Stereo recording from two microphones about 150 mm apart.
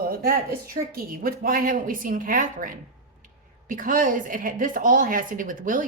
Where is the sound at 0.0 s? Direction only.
80° right.